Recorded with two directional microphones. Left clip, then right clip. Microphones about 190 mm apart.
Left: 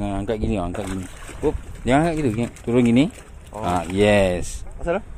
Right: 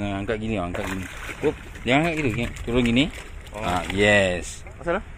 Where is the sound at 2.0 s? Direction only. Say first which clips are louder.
Left 3 dB; 40° left (ahead or behind).